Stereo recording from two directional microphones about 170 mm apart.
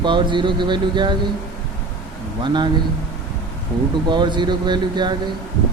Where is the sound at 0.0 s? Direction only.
30° right (ahead or behind).